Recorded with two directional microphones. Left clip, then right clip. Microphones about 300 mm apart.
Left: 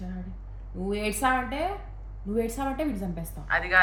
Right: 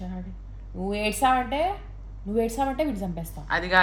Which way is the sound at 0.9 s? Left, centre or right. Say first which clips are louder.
Right 3 dB; centre.